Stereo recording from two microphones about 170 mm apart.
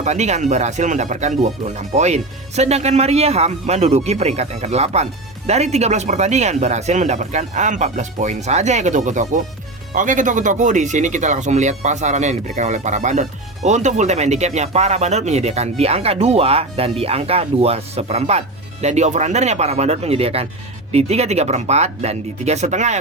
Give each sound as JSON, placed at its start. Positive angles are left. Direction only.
{"t": 0.0, "sound": "speech", "side_deg": -40}